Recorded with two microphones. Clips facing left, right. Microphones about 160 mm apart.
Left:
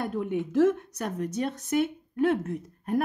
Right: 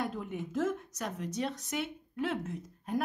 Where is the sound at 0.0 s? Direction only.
60° left (ahead or behind).